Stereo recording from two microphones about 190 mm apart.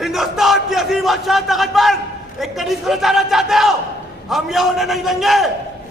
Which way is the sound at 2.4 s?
Centre (ahead or behind).